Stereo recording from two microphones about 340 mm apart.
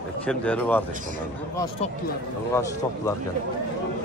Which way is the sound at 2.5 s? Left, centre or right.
Centre.